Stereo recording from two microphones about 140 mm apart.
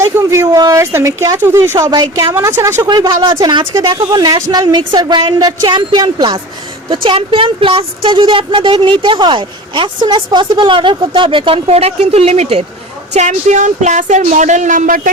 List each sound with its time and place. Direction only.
0.0 s a woman's voice: 20° right (ahead or behind); by 15.1 s 75° right (ahead or behind)